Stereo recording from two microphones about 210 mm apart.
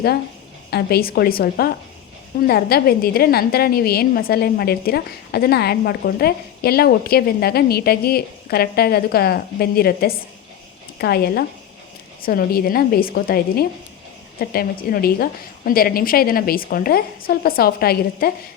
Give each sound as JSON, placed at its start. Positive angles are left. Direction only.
{"t": 0.7, "sound": "a woman's voice", "side_deg": 50}